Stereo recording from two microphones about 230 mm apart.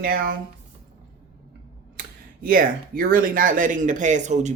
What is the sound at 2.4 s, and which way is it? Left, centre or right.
Speech, right.